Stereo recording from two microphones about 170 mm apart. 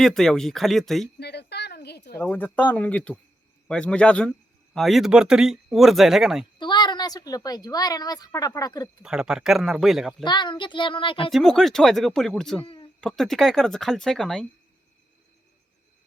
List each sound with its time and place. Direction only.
0.0 s a man's voice: centre (ahead or behind)
1.2 s a sound: 75° left (ahead or behind)
2.2 s a man's voice: 10° left (ahead or behind)
6.6 s a woman's voice: 25° left (ahead or behind)
9.0 s a man's voice: 5° right (ahead or behind)
10.2 s a child's voice: 25° left (ahead or behind)
11.3 s a man's voice: centre (ahead or behind)
12.6 s a sound: 30° left (ahead or behind)
13.0 s a man's voice: centre (ahead or behind)